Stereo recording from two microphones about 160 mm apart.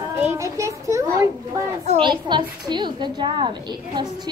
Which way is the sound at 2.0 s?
30° right (ahead or behind).